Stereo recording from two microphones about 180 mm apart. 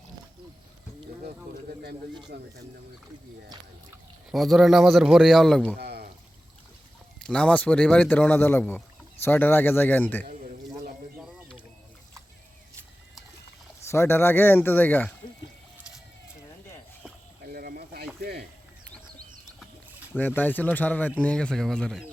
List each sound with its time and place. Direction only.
2.3 s speech: 65° right (ahead or behind)
4.3 s a man's voice: centre (ahead or behind)
5.8 s pour: 65° right (ahead or behind)
7.2 s speech: 5° left (ahead or behind)
11.2 s a sound: centre (ahead or behind)
13.8 s speech: 15° left (ahead or behind)
17.4 s a sound: 55° right (ahead or behind)
20.1 s a man's voice: 10° left (ahead or behind)